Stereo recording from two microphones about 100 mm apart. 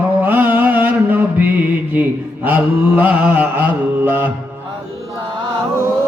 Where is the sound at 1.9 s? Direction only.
20° right (ahead or behind).